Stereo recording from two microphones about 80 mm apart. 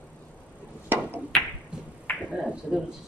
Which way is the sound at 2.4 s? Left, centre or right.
Centre.